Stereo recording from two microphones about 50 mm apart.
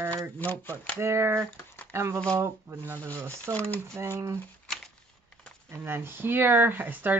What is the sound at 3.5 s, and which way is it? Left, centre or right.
Speech, left.